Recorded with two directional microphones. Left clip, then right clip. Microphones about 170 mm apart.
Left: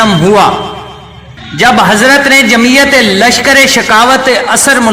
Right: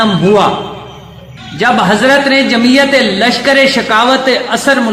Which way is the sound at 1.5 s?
25° left (ahead or behind).